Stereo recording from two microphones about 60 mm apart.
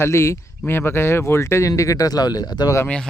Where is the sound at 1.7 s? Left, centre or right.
Left.